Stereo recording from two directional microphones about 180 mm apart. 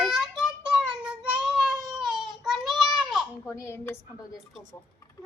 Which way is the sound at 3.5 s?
15° left (ahead or behind).